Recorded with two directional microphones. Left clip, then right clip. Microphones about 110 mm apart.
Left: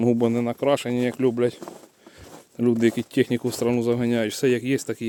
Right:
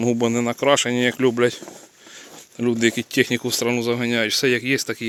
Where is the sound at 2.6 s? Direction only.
45° left (ahead or behind).